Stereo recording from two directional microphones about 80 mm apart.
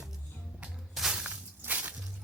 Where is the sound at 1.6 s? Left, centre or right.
Right.